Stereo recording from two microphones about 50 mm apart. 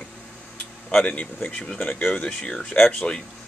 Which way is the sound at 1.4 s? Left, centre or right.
Centre.